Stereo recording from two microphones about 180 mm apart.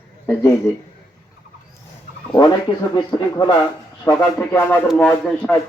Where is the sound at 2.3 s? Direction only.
25° left (ahead or behind); by 5.5 s 5° left (ahead or behind).